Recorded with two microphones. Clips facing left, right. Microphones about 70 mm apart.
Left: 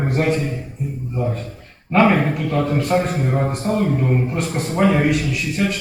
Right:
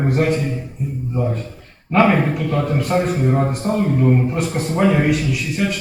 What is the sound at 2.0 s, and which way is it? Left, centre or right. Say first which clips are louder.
A man's voice: even; centre.